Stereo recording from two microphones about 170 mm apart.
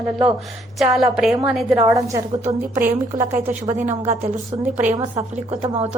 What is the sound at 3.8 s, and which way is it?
Speech, 45° right (ahead or behind).